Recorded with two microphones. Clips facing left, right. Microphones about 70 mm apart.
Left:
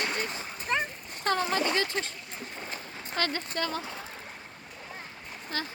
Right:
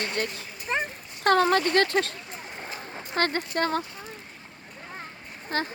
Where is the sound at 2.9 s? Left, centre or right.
Right.